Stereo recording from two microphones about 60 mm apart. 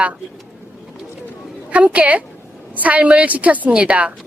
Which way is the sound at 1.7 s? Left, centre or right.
Right.